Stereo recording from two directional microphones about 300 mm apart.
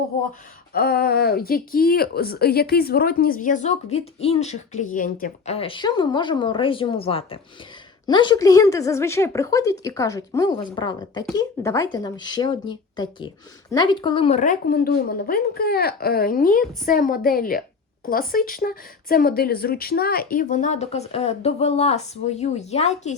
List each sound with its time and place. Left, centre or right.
0.7 s a woman's voice: left